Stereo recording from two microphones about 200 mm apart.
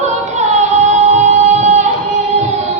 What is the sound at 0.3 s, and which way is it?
Music, 35° right (ahead or behind).